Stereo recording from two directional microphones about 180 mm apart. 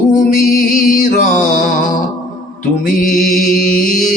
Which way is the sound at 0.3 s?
50° left (ahead or behind).